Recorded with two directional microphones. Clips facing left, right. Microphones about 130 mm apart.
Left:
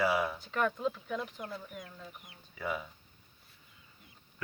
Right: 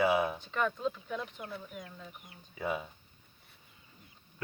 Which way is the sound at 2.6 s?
25° right (ahead or behind).